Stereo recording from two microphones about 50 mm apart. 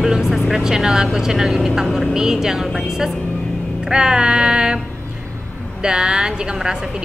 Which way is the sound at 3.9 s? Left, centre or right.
Centre.